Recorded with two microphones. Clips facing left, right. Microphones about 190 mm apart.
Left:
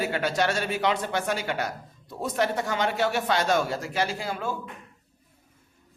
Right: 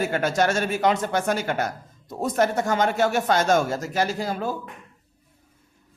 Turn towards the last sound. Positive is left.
turn(degrees=-40)  # may be behind; listen again after turning